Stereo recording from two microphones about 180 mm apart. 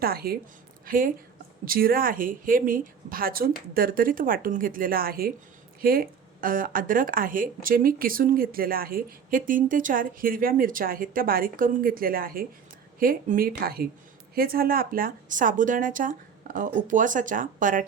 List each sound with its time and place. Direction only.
0.0 s a woman's voice: 60° right (ahead or behind)